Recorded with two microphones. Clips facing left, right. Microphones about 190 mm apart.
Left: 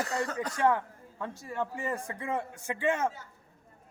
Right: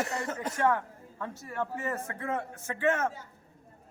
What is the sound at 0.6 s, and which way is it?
Speech, 15° left (ahead or behind).